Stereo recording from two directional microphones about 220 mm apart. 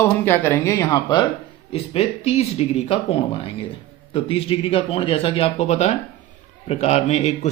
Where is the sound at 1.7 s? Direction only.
25° left (ahead or behind).